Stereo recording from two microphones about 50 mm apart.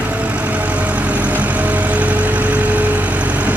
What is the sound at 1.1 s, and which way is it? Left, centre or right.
Vehicle, right.